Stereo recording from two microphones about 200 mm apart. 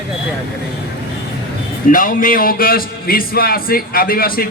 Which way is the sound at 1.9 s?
45° left (ahead or behind).